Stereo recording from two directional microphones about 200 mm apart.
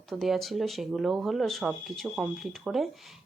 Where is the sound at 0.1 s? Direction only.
Centre (ahead or behind).